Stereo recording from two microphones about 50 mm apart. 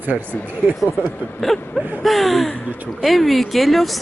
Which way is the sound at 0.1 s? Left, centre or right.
Centre.